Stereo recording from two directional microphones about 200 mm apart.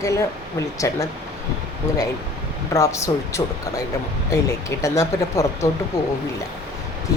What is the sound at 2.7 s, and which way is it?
Speech, 15° left (ahead or behind).